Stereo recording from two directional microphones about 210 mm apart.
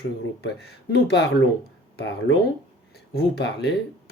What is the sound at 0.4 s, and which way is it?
Speech, 50° left (ahead or behind).